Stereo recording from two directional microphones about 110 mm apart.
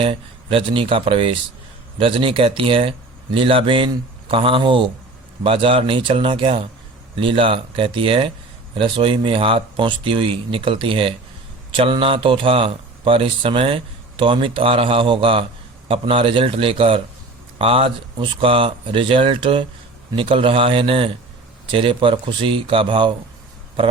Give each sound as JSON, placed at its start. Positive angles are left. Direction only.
{"t": 0.0, "sound": "speech", "side_deg": -55}